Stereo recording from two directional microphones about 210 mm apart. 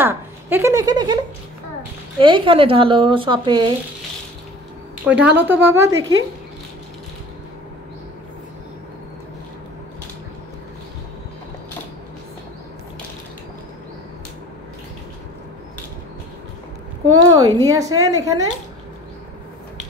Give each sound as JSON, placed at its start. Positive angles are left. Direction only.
{"t": 0.0, "sound": "speech", "side_deg": -10}
{"t": 5.0, "sound": "a woman's voice", "side_deg": -5}
{"t": 17.0, "sound": "a woman's voice", "side_deg": -20}